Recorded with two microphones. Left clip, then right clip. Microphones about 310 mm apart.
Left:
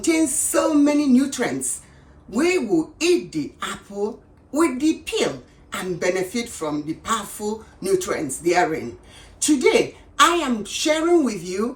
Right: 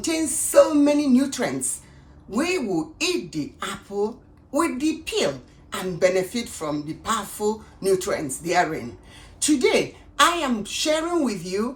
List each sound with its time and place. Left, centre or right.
0.0 s a woman's voice: centre